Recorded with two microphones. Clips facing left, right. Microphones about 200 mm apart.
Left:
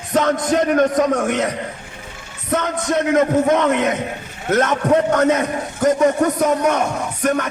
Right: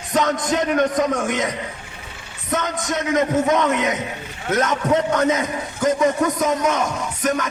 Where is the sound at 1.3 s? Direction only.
60° left (ahead or behind).